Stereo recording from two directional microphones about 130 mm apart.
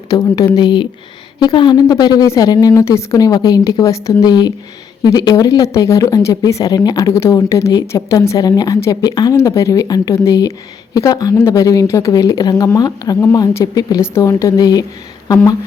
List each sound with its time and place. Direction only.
0.1 s speech: 30° left (ahead or behind)